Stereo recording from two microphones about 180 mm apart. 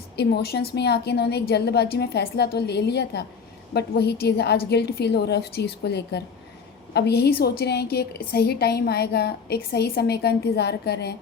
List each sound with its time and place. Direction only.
0.2 s a woman's voice: 65° left (ahead or behind)